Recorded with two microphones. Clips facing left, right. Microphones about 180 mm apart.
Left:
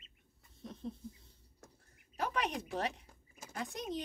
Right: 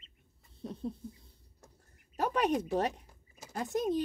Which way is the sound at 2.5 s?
40° right (ahead or behind).